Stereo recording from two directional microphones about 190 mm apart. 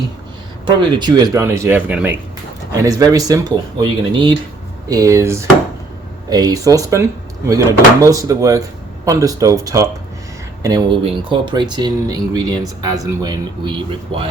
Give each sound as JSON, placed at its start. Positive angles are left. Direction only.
{"t": 0.6, "sound": "speech", "side_deg": -25}